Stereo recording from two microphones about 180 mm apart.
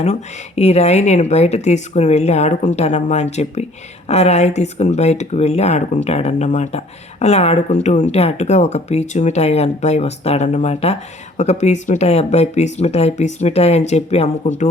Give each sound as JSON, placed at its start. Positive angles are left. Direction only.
{"t": 0.0, "sound": "speech", "side_deg": 35}